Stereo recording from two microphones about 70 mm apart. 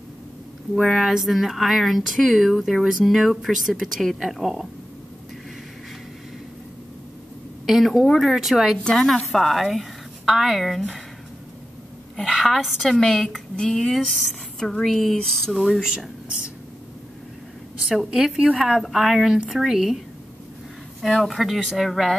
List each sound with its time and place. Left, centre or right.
0.7 s speech: centre
7.6 s speech: centre
12.3 s a woman's voice: centre
17.8 s speech: centre
18.4 s a woman's voice: centre
18.7 s speech: centre
21.0 s speech: centre